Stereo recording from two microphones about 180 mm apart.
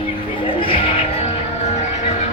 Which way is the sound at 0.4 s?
30° left (ahead or behind).